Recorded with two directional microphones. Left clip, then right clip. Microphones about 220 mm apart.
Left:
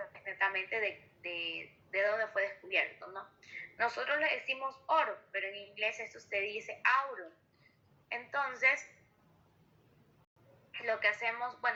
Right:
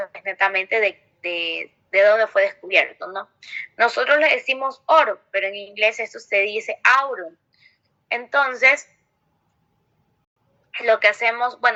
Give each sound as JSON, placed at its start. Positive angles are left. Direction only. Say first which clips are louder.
{"t": 0.0, "sound": "speech", "louder": "right 13 dB", "side_deg": -45}
{"t": 10.7, "sound": "speech", "louder": "right 16 dB", "side_deg": -45}